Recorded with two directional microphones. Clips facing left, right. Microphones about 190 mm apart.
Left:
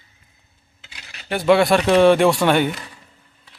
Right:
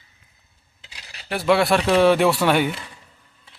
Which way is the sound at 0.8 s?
35° right (ahead or behind).